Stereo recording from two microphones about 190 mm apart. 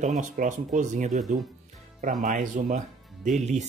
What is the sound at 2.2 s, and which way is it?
Speech, 40° right (ahead or behind).